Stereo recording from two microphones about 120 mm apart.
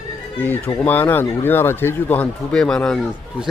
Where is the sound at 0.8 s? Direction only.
15° left (ahead or behind).